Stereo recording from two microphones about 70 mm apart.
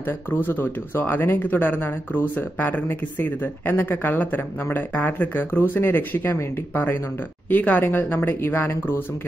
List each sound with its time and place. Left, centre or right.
0.0 s speech: left